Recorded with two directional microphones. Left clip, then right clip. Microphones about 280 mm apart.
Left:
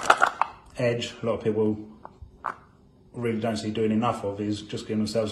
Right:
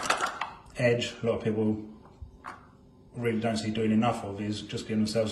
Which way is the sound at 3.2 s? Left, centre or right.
Centre.